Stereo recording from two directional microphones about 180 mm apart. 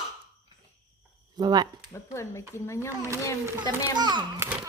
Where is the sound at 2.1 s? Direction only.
15° left (ahead or behind).